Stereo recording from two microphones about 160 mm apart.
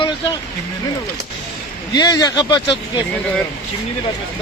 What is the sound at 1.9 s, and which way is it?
Speech, 25° left (ahead or behind).